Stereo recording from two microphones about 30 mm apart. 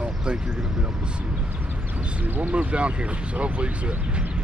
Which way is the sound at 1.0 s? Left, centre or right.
Right.